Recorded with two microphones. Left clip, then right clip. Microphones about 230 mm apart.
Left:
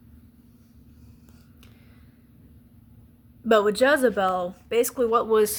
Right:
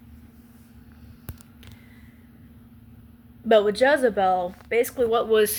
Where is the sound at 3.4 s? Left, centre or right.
Left.